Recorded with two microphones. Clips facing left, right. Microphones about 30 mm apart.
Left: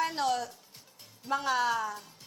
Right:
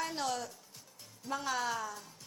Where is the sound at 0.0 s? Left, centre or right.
Centre.